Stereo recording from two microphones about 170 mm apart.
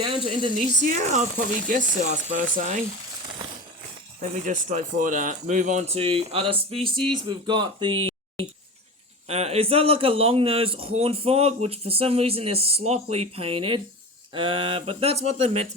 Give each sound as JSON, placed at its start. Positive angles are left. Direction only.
{"t": 0.0, "sound": "speech", "side_deg": -30}
{"t": 0.9, "sound": "speech", "side_deg": -45}
{"t": 4.2, "sound": "speech", "side_deg": -45}
{"t": 9.2, "sound": "a man's voice", "side_deg": -35}